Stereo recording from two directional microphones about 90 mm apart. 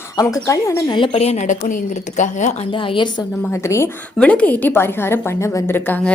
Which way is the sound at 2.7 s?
70° left (ahead or behind).